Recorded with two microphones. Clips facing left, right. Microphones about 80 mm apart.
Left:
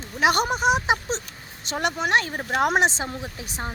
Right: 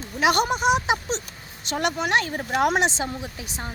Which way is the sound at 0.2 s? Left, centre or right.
Left.